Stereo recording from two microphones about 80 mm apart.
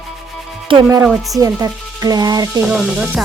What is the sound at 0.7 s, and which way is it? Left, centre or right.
Speech, right.